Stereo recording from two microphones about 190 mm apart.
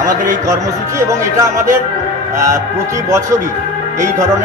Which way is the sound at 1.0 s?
15° right (ahead or behind).